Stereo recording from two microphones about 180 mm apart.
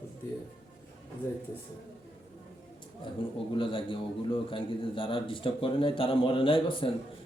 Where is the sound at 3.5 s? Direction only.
30° left (ahead or behind).